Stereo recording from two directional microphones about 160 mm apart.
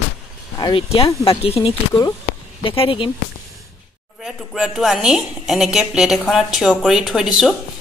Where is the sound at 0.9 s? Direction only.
35° left (ahead or behind).